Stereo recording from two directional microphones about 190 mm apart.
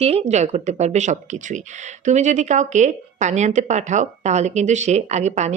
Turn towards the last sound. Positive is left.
turn(degrees=-35)  # may be behind; listen again after turning